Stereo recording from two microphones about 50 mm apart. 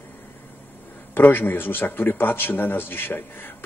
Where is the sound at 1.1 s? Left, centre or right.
Left.